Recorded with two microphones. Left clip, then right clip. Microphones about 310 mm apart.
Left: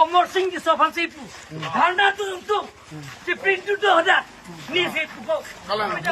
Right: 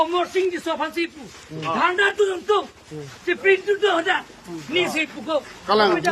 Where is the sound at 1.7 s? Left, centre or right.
Centre.